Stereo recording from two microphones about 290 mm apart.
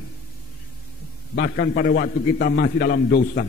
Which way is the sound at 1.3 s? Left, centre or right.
Left.